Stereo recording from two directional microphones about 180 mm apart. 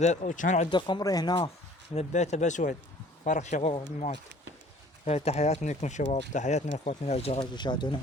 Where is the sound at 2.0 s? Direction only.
40° left (ahead or behind).